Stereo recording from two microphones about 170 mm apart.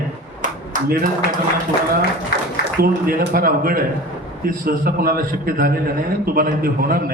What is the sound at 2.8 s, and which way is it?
A man's voice, 60° right (ahead or behind).